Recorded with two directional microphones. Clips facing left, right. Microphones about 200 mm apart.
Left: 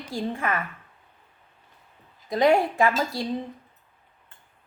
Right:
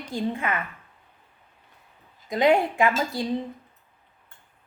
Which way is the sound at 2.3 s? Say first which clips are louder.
Even; 20° right (ahead or behind).